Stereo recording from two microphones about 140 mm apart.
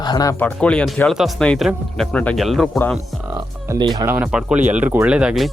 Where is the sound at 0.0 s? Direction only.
30° left (ahead or behind).